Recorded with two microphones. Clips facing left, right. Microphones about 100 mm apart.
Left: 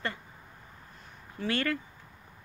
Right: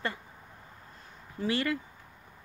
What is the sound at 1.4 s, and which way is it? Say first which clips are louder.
Speech: right 1 dB; 15° right (ahead or behind).